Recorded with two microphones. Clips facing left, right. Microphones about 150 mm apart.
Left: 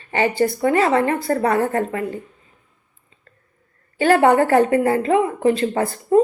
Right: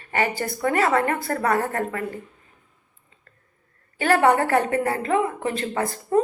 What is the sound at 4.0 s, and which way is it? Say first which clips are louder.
Speech: left 4 dB; 30° left (ahead or behind).